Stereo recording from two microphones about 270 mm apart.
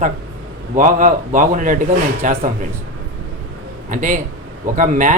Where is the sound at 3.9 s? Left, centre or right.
Right.